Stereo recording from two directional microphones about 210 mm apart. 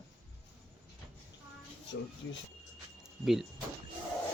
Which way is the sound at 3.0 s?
Centre (ahead or behind).